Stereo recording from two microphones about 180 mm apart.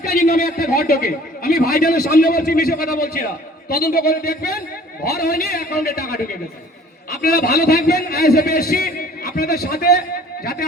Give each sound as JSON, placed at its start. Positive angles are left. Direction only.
{"t": 0.0, "sound": "a man's voice", "side_deg": 55}